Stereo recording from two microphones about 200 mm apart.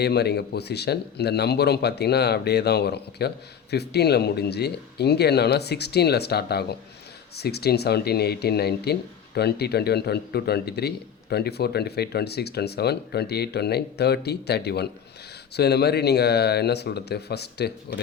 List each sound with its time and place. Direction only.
0.0 s speech: 55° left (ahead or behind)